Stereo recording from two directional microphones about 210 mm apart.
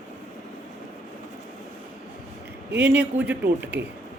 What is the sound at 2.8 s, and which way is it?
Speech, 5° right (ahead or behind).